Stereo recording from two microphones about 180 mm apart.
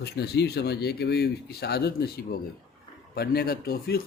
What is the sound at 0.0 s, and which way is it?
Speech, 65° left (ahead or behind).